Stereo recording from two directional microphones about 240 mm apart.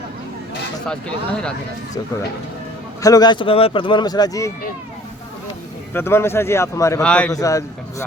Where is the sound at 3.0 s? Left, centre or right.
Centre.